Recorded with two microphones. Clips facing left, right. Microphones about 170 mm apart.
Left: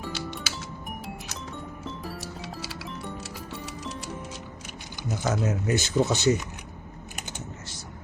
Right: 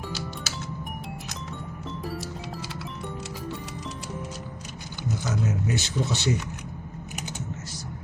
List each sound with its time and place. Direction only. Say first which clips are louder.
5.2 s speech: left 3 dB; 50° left (ahead or behind)